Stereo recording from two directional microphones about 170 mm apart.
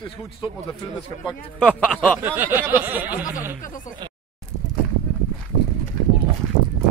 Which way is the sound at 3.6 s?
50° left (ahead or behind).